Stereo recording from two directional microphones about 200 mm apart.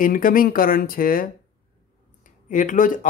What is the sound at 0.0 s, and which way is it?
Speech, 45° left (ahead or behind).